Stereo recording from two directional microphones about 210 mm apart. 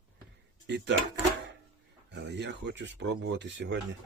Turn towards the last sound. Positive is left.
turn(degrees=-55)  # may be behind; listen again after turning